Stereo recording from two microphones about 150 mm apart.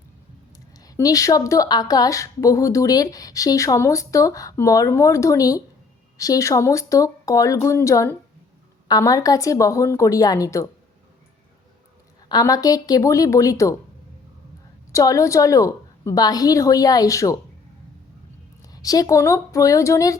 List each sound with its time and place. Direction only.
0.5 s speech: 25° left (ahead or behind)
12.3 s speech: 25° left (ahead or behind)
14.9 s speech: 20° left (ahead or behind)
18.6 s speech: 25° left (ahead or behind)